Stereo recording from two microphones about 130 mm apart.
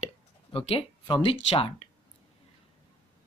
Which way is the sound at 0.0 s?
45° left (ahead or behind).